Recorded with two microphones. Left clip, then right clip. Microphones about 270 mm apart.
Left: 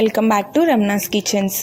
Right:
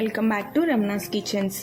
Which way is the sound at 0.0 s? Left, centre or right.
Left.